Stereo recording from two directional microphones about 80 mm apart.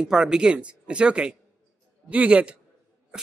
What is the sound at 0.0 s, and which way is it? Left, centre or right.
Speech, centre.